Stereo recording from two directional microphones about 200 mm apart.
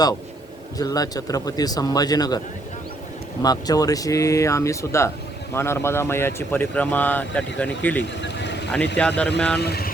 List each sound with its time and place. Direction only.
0.8 s speech: 20° left (ahead or behind)
3.4 s speech: 20° left (ahead or behind)
8.2 s vehicle: 60° left (ahead or behind)
9.0 s speech: 5° left (ahead or behind)
9.6 s speech: 50° left (ahead or behind)